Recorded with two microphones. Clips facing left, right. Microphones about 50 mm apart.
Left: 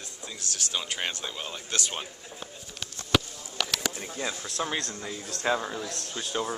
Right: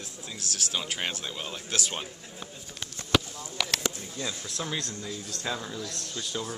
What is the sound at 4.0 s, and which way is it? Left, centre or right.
Speech, left.